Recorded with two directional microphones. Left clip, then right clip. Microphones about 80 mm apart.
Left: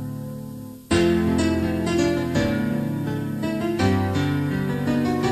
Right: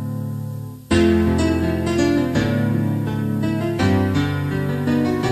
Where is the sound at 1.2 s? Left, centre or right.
Centre.